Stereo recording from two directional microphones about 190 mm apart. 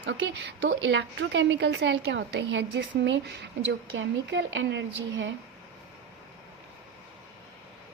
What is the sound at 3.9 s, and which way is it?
A woman's voice, 80° right.